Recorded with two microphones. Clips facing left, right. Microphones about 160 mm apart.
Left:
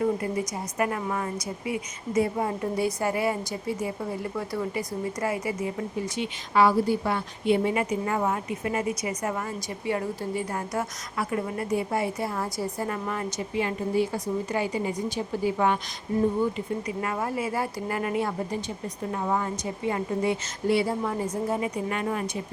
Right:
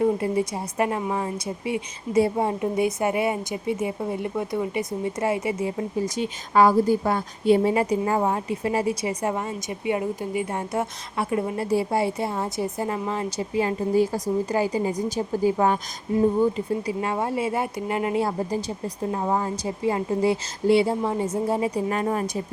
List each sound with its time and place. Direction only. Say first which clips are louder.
0.0 s a woman's voice: right 4 dB; 25° right (ahead or behind)
6.1 s a woman's voice: right 3 dB; 45° right (ahead or behind)